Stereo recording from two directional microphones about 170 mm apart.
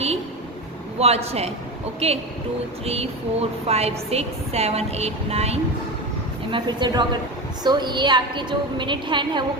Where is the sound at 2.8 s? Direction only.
35° right (ahead or behind).